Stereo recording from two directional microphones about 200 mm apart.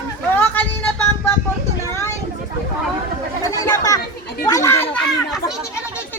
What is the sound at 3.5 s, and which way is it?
Chatter, 15° left (ahead or behind).